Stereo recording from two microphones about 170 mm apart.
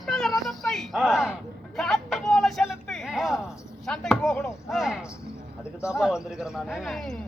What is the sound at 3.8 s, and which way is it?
Chopping, 5° left (ahead or behind).